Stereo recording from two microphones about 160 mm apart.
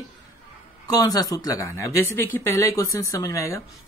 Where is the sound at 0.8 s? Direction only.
25° left (ahead or behind).